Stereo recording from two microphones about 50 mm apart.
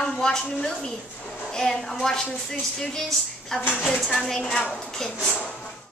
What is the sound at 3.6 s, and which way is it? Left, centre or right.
Speech, left.